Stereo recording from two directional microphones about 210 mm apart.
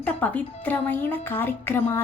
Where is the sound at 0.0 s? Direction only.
5° left (ahead or behind).